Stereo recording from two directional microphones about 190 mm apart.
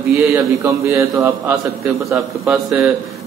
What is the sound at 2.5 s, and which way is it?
Speech, 5° right (ahead or behind).